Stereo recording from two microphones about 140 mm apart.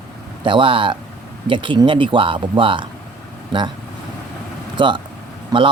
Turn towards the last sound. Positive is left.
turn(degrees=-30)  # may be behind; listen again after turning